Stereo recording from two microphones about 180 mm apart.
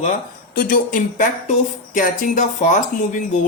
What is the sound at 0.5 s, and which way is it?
Speech, 50° left (ahead or behind).